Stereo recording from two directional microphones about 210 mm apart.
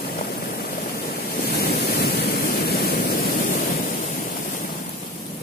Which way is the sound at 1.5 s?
45° left (ahead or behind).